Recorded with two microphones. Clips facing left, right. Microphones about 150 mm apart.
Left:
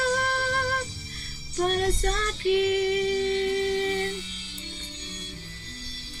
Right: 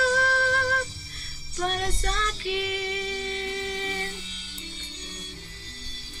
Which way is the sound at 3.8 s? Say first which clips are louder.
Left 6 dB; 35° left (ahead or behind).